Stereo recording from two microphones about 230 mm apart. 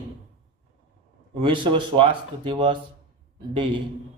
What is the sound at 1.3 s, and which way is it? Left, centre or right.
A man's voice, right.